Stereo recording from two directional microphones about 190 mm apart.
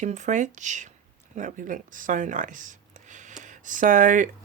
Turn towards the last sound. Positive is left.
turn(degrees=-45)  # may be behind; listen again after turning